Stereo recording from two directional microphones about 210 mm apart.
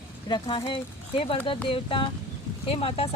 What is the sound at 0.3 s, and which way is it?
Speech, 20° left (ahead or behind).